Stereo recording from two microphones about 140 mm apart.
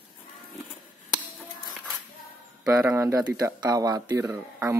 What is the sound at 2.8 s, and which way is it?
Speech, 15° right (ahead or behind).